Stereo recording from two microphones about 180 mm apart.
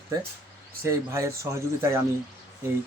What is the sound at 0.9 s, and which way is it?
Speech, 15° right (ahead or behind).